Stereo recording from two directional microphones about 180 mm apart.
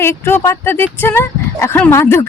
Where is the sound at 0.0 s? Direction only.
15° left (ahead or behind).